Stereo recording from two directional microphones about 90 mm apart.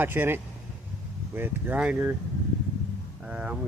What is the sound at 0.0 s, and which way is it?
Speech, 25° right (ahead or behind).